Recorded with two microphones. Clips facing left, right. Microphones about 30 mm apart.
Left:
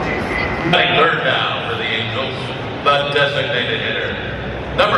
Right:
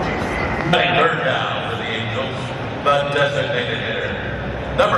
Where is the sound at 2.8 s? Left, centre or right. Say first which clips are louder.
Left 2 dB; left.